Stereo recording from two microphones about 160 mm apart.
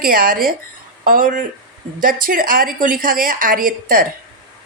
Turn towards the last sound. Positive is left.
turn(degrees=-60)  # may be behind; listen again after turning